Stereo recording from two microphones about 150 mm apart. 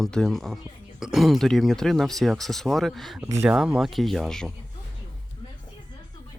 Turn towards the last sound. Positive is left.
turn(degrees=5)  # may be behind; listen again after turning